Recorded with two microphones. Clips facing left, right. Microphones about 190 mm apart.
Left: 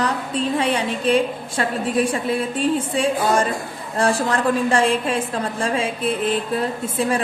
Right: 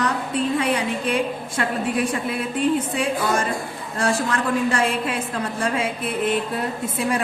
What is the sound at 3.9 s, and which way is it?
A woman's voice, 35° left (ahead or behind).